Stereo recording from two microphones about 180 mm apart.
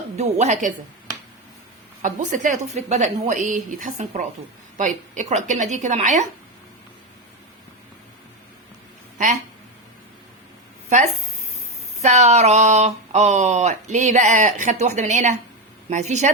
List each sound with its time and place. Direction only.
0.2 s speech: 40° right (ahead or behind)
2.0 s a woman's voice: 45° right (ahead or behind)
9.1 s speech: 45° right (ahead or behind)
10.8 s speech: 40° right (ahead or behind)